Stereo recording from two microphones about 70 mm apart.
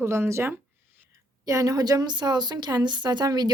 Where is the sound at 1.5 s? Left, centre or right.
Right.